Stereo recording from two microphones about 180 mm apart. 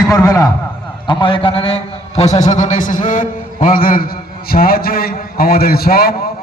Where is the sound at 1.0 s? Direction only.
25° left (ahead or behind).